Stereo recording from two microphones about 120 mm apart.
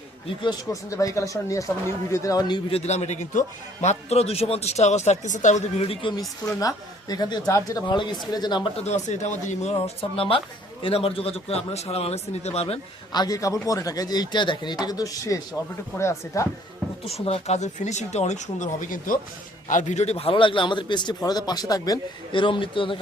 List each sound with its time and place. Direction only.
0.4 s speech: 30° left (ahead or behind)
2.6 s a man's voice: 60° left (ahead or behind); by 3.4 s 80° left
3.8 s a man's voice: 60° left (ahead or behind); by 5.8 s 85° left
5.9 s a man's voice: 45° left (ahead or behind)
6.6 s a man's voice: 30° left (ahead or behind)
8.8 s speech: 75° left (ahead or behind)
13.1 s a man's voice: 30° left (ahead or behind)
17.1 s a man's voice: 55° left (ahead or behind); by 22.4 s 30° left (ahead or behind)
22.4 s a man's voice: 45° left (ahead or behind)